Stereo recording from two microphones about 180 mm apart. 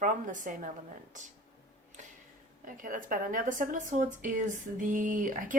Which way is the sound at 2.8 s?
50° right (ahead or behind).